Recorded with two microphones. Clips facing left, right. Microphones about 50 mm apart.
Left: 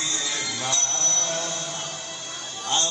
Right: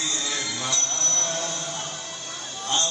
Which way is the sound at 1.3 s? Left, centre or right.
Left.